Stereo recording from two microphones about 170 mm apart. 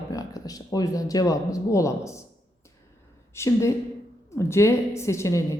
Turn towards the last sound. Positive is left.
turn(degrees=15)  # may be behind; listen again after turning